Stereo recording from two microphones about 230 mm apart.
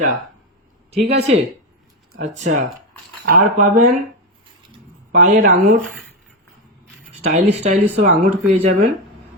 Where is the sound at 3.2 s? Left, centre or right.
Right.